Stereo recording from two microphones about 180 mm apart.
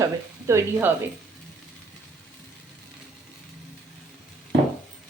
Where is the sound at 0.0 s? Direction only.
15° right (ahead or behind).